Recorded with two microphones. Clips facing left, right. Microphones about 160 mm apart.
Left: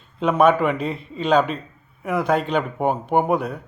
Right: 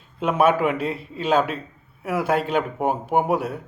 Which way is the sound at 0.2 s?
5° right (ahead or behind).